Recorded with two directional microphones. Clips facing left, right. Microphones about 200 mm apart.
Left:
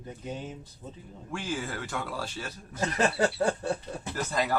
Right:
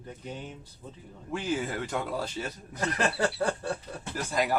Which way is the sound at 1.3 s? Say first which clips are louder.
Right 3 dB; 20° right (ahead or behind).